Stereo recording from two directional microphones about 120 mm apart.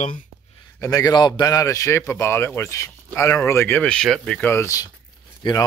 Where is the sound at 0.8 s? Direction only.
30° left (ahead or behind).